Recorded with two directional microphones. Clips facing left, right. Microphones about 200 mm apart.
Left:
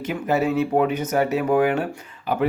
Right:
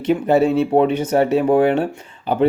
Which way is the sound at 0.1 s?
30° right (ahead or behind).